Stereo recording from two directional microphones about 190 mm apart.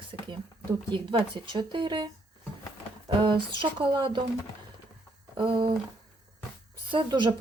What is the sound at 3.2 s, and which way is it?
Speech, 25° right (ahead or behind).